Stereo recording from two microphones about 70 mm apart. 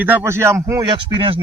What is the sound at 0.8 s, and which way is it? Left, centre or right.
Speech, right.